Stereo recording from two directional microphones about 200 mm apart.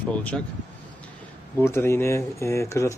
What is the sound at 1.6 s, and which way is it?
Speech, 15° left (ahead or behind).